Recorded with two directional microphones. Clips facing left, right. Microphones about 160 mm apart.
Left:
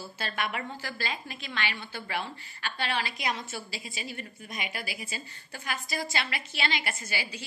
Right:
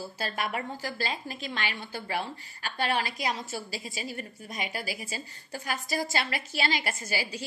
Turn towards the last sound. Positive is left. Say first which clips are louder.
# right 3 dB
turn(degrees=-40)  # may be behind; listen again after turning